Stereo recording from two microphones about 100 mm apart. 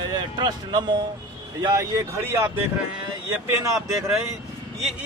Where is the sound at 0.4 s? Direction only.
45° right (ahead or behind).